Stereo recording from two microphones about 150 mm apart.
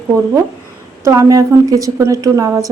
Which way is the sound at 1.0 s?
20° right (ahead or behind).